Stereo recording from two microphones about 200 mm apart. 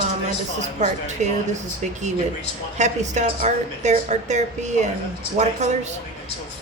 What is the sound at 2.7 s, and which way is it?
A woman's voice, 35° right (ahead or behind).